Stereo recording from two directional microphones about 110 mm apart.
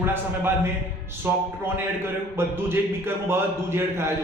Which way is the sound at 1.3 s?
20° right (ahead or behind).